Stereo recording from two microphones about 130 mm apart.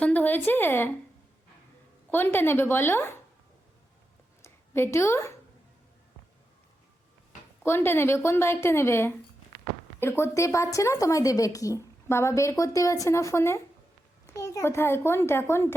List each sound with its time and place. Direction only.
0.0 s speech: 15° left (ahead or behind)
2.0 s speech: 15° left (ahead or behind)
4.4 s a woman's voice: 20° left (ahead or behind)
7.6 s a woman's voice: 20° left (ahead or behind)